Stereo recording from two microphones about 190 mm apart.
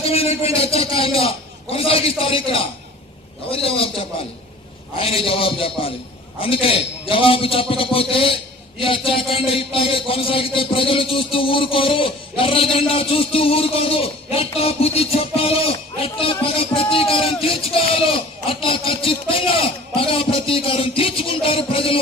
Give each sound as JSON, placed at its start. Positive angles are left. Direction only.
{"t": 0.0, "sound": "a sound", "side_deg": 30}
{"t": 1.7, "sound": "a man's voice", "side_deg": 30}
{"t": 4.9, "sound": "a man's voice", "side_deg": 30}